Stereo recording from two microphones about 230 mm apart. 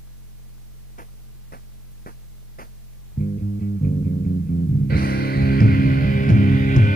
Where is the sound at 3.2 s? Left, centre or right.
Left.